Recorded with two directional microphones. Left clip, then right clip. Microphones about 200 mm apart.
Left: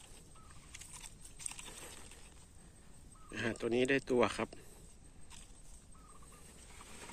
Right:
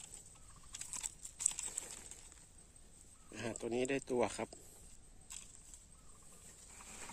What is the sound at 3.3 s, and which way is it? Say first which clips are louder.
Speech: left 5 dB; 5° right (ahead or behind).